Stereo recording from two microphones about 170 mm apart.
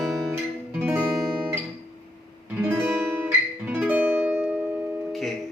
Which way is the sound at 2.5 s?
10° right (ahead or behind).